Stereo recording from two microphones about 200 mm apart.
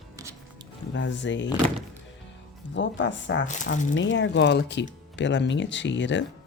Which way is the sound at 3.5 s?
40° left (ahead or behind).